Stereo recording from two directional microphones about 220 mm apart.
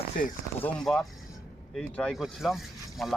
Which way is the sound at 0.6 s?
5° left (ahead or behind).